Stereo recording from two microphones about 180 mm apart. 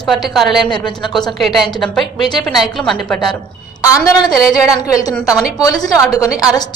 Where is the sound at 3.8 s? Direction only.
20° left (ahead or behind).